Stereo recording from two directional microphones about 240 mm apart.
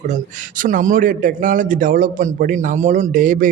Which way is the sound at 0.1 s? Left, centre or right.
Right.